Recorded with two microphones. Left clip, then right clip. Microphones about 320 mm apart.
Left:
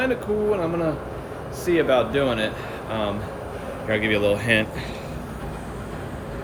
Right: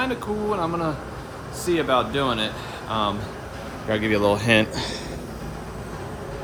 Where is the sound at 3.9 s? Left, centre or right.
Centre.